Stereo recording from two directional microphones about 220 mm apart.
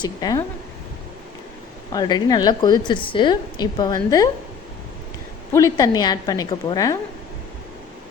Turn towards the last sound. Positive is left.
turn(degrees=15)  # may be behind; listen again after turning